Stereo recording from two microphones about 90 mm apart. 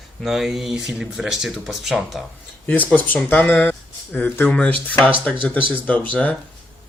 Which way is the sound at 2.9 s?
20° left (ahead or behind).